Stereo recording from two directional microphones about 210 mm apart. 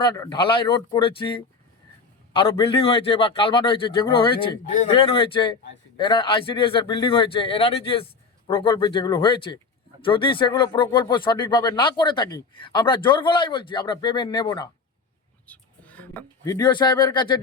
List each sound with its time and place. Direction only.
0.0 s speech: 20° left (ahead or behind)
15.4 s speech: 5° left (ahead or behind)